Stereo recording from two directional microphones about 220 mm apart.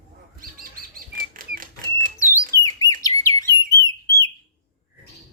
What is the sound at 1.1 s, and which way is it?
Typewriter, 40° right (ahead or behind).